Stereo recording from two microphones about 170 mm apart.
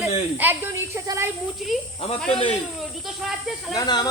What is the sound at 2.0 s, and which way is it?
Speech, 35° left (ahead or behind).